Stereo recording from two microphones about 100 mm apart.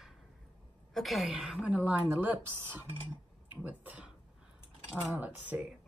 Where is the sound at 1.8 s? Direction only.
20° right (ahead or behind).